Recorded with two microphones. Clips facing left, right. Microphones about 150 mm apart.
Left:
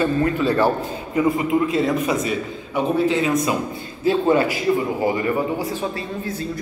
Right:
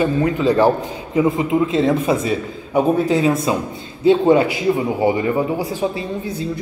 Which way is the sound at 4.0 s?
20° right (ahead or behind).